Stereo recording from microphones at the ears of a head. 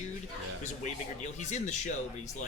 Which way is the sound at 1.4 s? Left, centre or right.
Left.